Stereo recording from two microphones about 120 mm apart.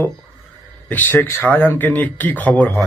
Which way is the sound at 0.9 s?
15° left (ahead or behind).